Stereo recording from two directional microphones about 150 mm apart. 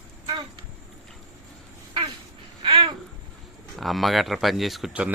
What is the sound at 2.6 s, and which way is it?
Babbling, 35° right (ahead or behind).